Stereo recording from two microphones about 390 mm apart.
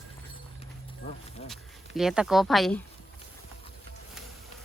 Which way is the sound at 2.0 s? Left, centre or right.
Centre.